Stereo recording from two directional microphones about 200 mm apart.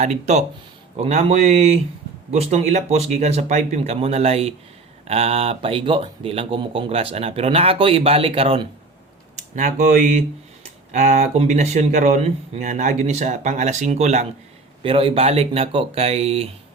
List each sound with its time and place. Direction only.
0.0 s speech: 35° right (ahead or behind)